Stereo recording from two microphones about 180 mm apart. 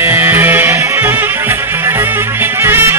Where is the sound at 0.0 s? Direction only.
10° right (ahead or behind).